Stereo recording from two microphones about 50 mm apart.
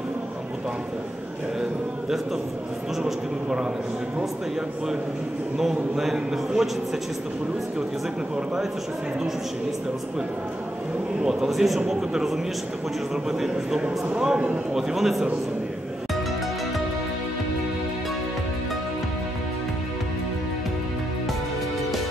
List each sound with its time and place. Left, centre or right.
3.0 s a man's voice: centre
5.6 s a man's voice: centre
11.2 s a man's voice: centre
14.8 s a man's voice: centre